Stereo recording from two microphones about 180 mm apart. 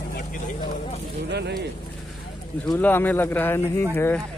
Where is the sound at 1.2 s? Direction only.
70° right (ahead or behind).